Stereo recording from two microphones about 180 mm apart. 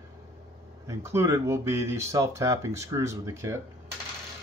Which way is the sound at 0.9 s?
15° right (ahead or behind).